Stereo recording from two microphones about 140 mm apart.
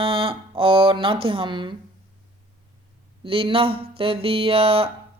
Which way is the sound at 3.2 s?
40° right (ahead or behind).